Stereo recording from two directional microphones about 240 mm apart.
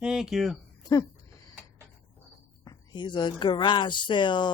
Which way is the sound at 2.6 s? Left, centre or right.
Centre.